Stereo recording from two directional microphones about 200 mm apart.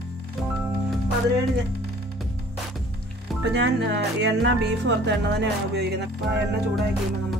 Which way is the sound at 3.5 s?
60° right (ahead or behind).